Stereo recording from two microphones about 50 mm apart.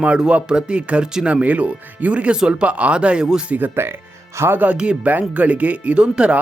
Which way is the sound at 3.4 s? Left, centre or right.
Right.